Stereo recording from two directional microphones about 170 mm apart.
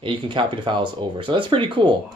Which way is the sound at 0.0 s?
30° right (ahead or behind).